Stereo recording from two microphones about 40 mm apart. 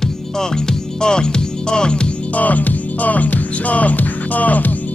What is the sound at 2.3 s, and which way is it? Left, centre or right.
Music, left.